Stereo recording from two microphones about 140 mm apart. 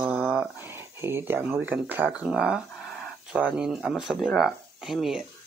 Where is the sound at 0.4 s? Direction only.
15° right (ahead or behind).